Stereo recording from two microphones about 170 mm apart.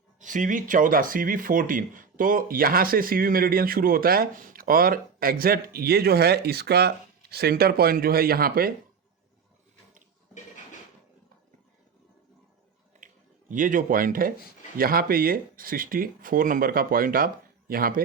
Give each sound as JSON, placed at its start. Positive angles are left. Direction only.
{"t": 0.2, "sound": "speech", "side_deg": -50}
{"t": 13.5, "sound": "speech", "side_deg": -50}